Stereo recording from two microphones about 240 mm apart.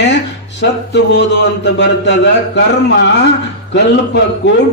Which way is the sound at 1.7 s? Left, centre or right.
Left.